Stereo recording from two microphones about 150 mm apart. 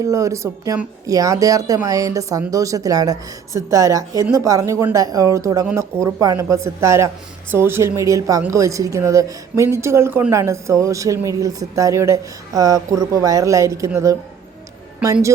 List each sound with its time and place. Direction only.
0.0 s a woman's voice: 20° right (ahead or behind)